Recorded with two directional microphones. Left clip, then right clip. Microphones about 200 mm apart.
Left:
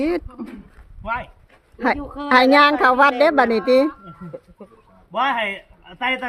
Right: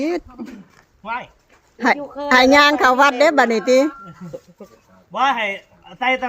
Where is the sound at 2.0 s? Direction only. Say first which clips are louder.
Right 3 dB; 50° left (ahead or behind).